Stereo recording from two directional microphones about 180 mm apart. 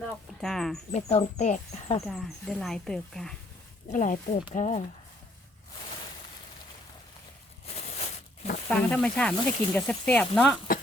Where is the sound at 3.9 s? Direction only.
45° left (ahead or behind).